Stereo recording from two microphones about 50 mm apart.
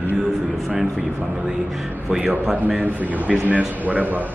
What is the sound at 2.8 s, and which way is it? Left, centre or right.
Speech, right.